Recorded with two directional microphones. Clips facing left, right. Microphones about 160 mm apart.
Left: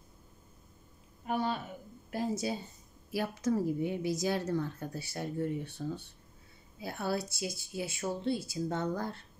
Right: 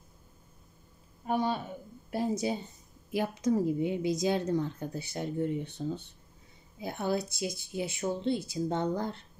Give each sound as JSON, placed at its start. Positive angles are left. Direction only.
{"t": 2.0, "sound": "a woman's voice", "side_deg": -20}